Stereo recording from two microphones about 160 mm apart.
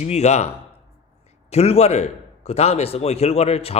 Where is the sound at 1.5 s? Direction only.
40° left (ahead or behind).